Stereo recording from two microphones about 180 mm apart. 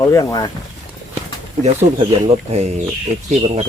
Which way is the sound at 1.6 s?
35° right (ahead or behind).